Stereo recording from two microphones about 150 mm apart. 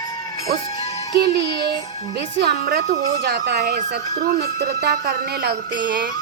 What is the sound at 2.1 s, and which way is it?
Music, 90° right.